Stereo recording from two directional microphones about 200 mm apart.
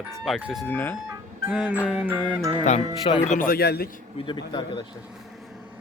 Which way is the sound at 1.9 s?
5° right (ahead or behind).